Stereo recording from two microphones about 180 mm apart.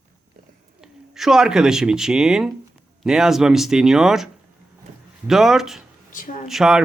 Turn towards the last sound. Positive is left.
turn(degrees=0)  # may be behind; listen again after turning